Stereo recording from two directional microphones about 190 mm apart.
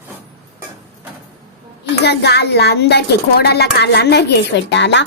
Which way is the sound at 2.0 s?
60° left (ahead or behind).